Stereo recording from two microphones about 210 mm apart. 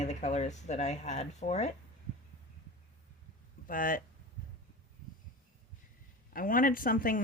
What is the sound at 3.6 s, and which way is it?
Speech, 40° left (ahead or behind).